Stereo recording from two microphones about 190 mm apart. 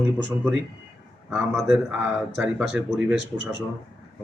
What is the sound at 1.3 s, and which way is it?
Speech, centre (ahead or behind).